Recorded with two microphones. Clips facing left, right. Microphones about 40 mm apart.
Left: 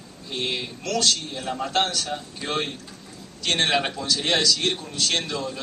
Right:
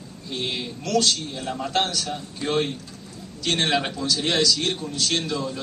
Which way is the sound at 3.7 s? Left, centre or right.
Centre.